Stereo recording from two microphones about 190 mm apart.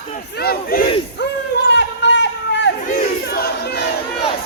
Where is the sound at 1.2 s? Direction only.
60° left (ahead or behind).